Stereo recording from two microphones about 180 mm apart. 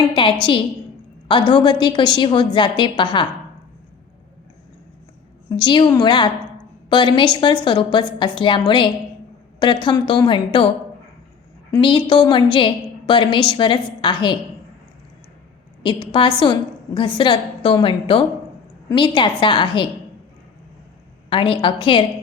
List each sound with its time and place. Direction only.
0.1 s a woman's voice: 30° left (ahead or behind)
5.5 s a woman's voice: 25° left (ahead or behind)
11.8 s a woman's voice: 25° left (ahead or behind)
15.8 s a woman's voice: 25° left (ahead or behind)
21.2 s a woman's voice: 30° left (ahead or behind)